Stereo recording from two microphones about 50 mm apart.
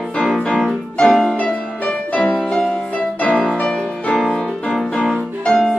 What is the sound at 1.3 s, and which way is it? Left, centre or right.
Music, left.